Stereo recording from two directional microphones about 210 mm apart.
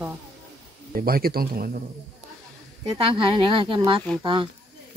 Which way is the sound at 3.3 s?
25° right (ahead or behind).